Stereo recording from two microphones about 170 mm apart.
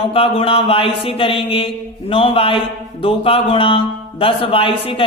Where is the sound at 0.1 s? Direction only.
35° left (ahead or behind).